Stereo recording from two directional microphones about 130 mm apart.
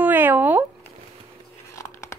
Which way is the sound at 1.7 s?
20° left (ahead or behind).